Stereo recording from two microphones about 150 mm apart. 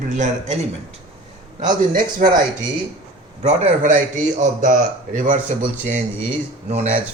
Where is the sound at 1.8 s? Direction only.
65° right (ahead or behind).